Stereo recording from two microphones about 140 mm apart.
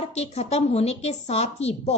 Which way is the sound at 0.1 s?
50° left (ahead or behind).